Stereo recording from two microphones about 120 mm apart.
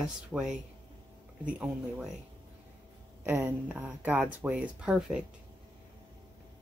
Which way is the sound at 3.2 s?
15° right (ahead or behind).